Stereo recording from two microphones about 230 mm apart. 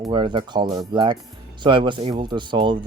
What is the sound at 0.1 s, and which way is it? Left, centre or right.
Speech, right.